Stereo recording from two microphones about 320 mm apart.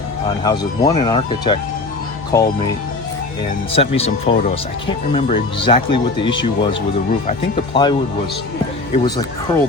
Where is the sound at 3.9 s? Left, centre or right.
Centre.